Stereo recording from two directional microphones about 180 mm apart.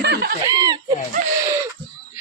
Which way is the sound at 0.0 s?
65° right (ahead or behind).